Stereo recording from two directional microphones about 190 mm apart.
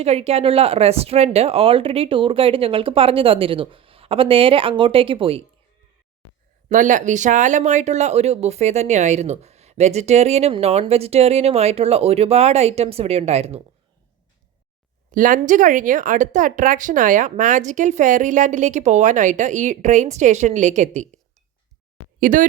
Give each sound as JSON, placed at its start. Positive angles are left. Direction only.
{"t": 0.0, "sound": "speech", "side_deg": -35}
{"t": 6.7, "sound": "speech", "side_deg": -40}
{"t": 15.1, "sound": "speech", "side_deg": -45}
{"t": 22.2, "sound": "speech", "side_deg": -45}